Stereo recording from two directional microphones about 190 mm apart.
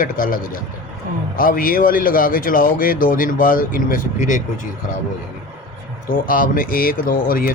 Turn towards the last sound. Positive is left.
turn(degrees=45)  # may be behind; listen again after turning